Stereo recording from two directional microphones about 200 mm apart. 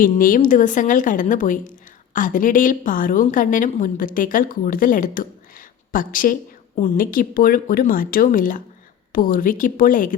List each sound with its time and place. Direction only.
0.0 s a woman's voice: 45° left (ahead or behind)